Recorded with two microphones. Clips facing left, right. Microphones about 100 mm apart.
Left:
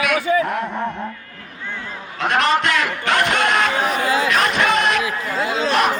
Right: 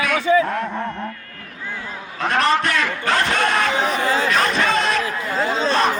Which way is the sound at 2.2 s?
20° left (ahead or behind).